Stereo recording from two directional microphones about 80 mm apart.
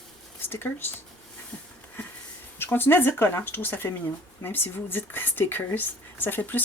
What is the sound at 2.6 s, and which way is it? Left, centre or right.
Speech, left.